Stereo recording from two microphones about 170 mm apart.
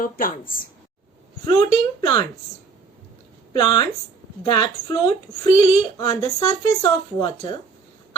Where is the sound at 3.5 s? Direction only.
25° left (ahead or behind).